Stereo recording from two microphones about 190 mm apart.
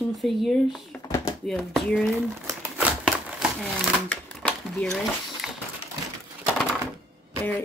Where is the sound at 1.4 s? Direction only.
Centre (ahead or behind).